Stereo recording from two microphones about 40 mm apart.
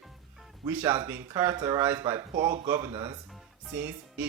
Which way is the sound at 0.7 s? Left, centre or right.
Right.